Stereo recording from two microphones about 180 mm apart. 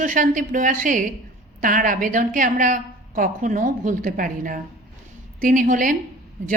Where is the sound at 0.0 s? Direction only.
45° right (ahead or behind).